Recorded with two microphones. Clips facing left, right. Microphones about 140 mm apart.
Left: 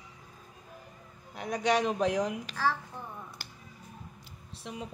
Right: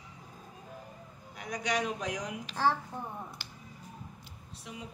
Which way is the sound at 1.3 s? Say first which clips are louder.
Left 5 dB; 30° left (ahead or behind).